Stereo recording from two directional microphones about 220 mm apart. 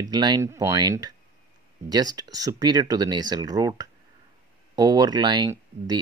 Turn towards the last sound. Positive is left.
turn(degrees=-20)  # may be behind; listen again after turning